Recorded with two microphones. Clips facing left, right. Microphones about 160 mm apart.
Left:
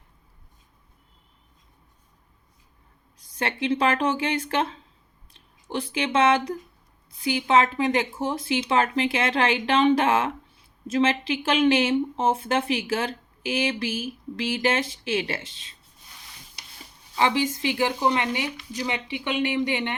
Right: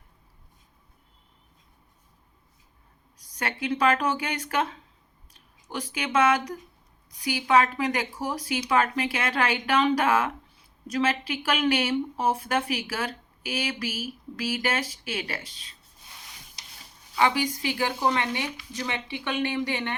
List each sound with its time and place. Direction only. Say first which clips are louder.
3.3 s speech: left 4 dB; 25° left (ahead or behind)
17.2 s speech: left 1 dB; 25° left (ahead or behind)